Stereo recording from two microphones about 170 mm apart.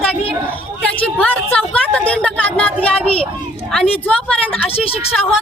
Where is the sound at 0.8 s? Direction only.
10° left (ahead or behind).